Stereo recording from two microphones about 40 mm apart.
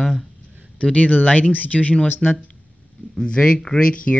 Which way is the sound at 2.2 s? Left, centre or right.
Centre.